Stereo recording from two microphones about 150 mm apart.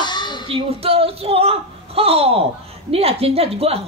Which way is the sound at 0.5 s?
40° right (ahead or behind).